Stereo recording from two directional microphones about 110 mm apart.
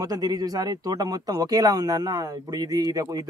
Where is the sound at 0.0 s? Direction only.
35° right (ahead or behind).